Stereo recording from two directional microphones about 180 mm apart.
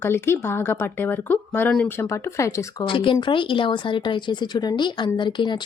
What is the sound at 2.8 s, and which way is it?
Speech, 30° left (ahead or behind).